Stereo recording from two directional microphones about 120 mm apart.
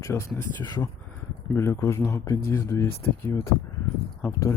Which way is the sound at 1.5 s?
25° left (ahead or behind).